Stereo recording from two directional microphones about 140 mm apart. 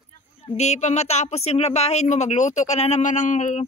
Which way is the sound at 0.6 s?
55° left (ahead or behind).